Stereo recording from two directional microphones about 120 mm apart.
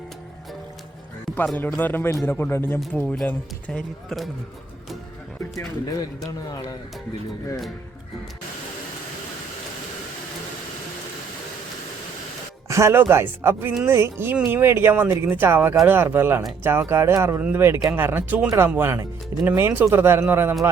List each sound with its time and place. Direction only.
1.5 s speech: 15° left (ahead or behind)
5.5 s speech: 30° left (ahead or behind)
12.6 s speech: 25° right (ahead or behind)